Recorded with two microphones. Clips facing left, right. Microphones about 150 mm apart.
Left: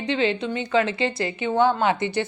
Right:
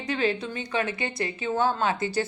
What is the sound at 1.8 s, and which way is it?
Speech, 20° left (ahead or behind).